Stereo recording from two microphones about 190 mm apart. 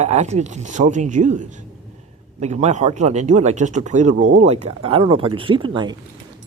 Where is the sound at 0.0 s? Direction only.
35° right (ahead or behind).